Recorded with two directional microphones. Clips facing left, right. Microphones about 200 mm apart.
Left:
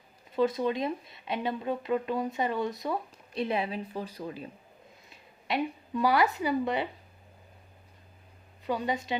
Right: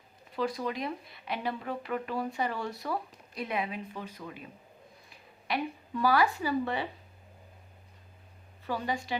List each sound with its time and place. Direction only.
0.3 s speech: 25° left (ahead or behind)
5.0 s speech: 20° left (ahead or behind)
8.6 s speech: 20° left (ahead or behind)